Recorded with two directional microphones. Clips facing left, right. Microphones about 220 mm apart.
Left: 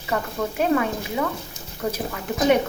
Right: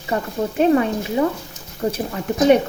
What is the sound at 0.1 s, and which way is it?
A woman's voice, 30° right (ahead or behind).